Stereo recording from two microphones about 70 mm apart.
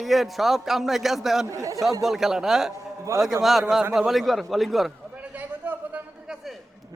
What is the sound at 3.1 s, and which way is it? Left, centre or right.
Speech, right.